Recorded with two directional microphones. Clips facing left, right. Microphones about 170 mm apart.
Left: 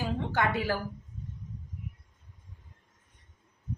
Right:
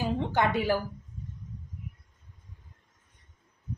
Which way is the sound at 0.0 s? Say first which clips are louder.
Right 3 dB; 15° right (ahead or behind).